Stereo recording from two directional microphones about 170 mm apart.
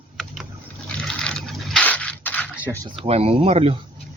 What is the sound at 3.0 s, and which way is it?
Speech, 35° right (ahead or behind).